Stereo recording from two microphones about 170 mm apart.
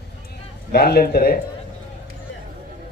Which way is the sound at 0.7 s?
65° left (ahead or behind).